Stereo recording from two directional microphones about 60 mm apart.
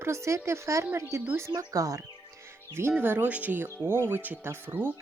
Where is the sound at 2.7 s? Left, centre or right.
Right.